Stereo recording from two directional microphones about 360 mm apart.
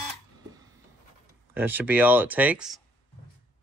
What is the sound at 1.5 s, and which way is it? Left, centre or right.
Speech, centre.